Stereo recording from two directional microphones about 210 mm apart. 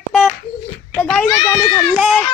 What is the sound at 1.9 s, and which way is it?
Speech, 5° right (ahead or behind).